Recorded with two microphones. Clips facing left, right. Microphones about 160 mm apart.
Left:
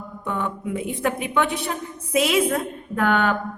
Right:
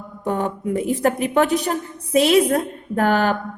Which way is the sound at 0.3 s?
40° right (ahead or behind).